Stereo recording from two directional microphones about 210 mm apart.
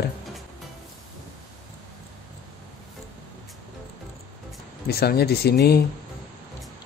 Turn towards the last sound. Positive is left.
turn(degrees=50)  # may be behind; listen again after turning